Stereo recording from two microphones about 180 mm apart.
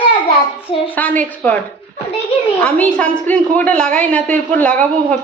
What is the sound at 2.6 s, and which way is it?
A woman's voice, 5° left (ahead or behind).